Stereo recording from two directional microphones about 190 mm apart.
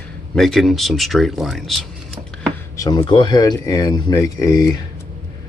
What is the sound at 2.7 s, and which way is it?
Speech, 20° left (ahead or behind).